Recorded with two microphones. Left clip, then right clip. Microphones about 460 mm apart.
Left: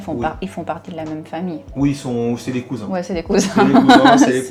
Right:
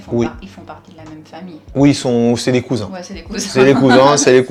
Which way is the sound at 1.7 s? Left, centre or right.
Right.